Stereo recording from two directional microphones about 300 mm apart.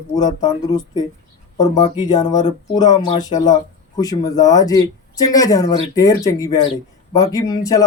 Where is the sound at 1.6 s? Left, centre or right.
Centre.